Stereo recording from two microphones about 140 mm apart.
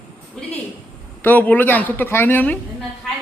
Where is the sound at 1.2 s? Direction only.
10° left (ahead or behind).